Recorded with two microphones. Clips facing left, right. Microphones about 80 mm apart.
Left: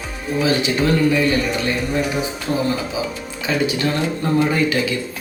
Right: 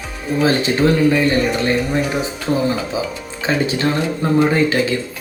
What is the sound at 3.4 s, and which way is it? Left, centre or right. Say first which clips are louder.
Speech: right 2 dB; right.